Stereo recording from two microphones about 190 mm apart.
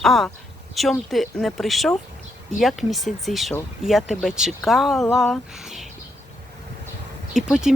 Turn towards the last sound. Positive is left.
turn(degrees=-5)  # may be behind; listen again after turning